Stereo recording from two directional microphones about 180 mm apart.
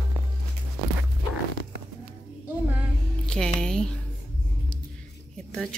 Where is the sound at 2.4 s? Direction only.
10° right (ahead or behind).